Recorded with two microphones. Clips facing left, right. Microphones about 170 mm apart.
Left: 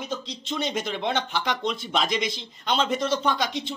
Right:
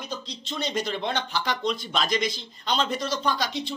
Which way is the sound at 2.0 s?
25° left (ahead or behind).